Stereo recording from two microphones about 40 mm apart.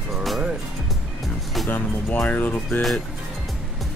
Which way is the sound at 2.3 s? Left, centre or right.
Left.